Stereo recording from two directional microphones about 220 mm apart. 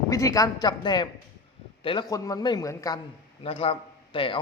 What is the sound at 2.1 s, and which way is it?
Speech, 15° left (ahead or behind).